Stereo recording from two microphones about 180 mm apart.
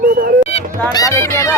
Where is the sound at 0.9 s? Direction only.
20° left (ahead or behind).